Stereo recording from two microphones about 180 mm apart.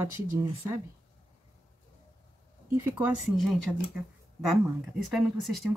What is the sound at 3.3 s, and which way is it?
Speech, centre (ahead or behind).